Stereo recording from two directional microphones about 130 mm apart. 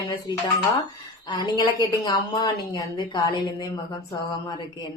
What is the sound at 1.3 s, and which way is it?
A woman's voice, 30° left (ahead or behind).